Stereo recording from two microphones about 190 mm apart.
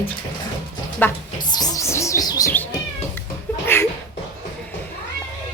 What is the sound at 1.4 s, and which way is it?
Speech, 20° left (ahead or behind).